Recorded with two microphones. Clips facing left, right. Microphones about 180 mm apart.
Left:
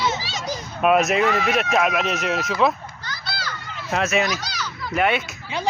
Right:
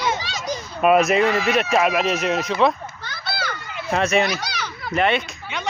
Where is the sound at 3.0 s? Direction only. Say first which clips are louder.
Right 3 dB; 55° right (ahead or behind).